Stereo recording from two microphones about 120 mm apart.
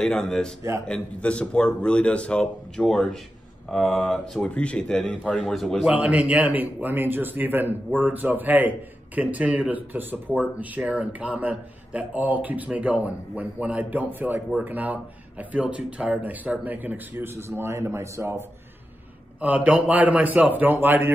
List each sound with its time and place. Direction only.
0.0 s a man's voice: 5° left (ahead or behind)
5.9 s a man's voice: 10° right (ahead or behind)
19.4 s a man's voice: 10° right (ahead or behind)